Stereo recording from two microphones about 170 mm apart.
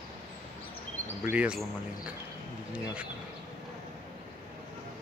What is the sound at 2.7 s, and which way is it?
Speech, 5° right (ahead or behind).